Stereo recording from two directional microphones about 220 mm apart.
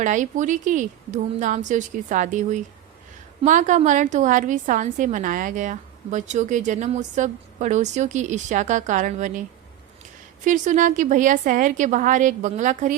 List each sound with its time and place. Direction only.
0.0 s a woman's voice: 35° right (ahead or behind)
10.4 s a woman's voice: 35° right (ahead or behind)